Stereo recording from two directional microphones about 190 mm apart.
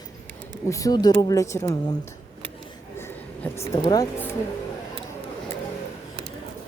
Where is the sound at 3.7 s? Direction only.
15° left (ahead or behind).